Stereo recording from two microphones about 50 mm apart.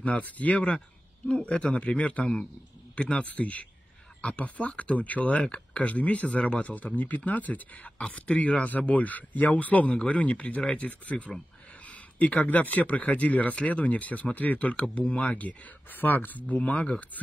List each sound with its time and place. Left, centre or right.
0.0 s speech: left